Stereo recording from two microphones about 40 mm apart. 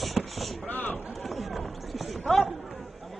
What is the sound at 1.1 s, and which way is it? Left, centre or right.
Run, centre.